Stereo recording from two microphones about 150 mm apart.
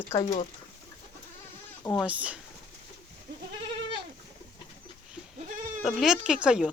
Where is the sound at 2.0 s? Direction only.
10° right (ahead or behind).